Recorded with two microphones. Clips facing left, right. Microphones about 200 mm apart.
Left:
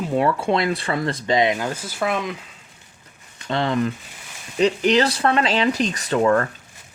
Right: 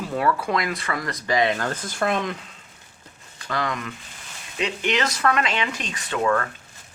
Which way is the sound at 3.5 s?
30° left (ahead or behind).